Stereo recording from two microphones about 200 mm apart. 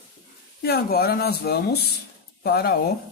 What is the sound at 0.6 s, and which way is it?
Speech, 50° left (ahead or behind).